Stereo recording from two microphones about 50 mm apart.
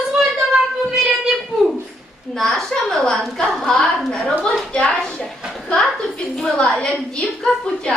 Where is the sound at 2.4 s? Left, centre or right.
Centre.